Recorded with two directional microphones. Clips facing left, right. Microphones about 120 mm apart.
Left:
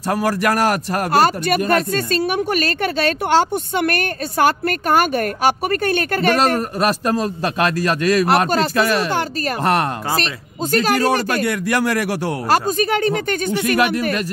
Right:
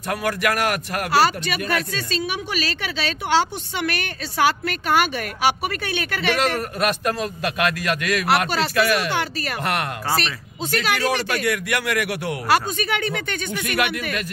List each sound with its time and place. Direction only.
0.1 s speech: 35° left (ahead or behind)
1.1 s speech: 50° left (ahead or behind)